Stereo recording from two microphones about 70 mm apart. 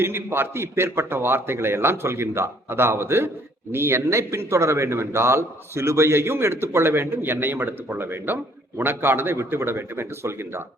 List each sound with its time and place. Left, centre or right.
0.0 s a man's voice: right